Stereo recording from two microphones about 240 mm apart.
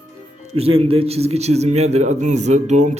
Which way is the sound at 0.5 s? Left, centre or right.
Right.